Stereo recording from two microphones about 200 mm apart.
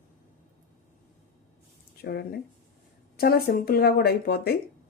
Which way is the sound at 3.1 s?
50° left (ahead or behind).